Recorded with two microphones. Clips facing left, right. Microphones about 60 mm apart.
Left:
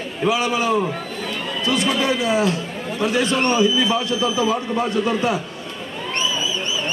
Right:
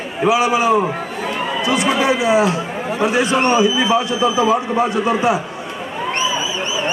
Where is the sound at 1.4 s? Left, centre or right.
Right.